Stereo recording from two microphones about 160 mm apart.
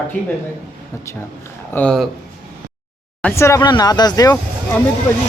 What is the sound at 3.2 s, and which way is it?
Speech, 15° left (ahead or behind).